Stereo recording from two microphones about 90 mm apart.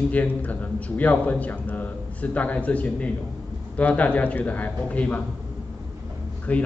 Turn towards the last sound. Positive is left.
turn(degrees=15)  # may be behind; listen again after turning